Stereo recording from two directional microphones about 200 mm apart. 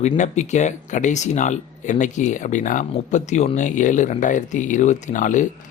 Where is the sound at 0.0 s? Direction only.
35° left (ahead or behind).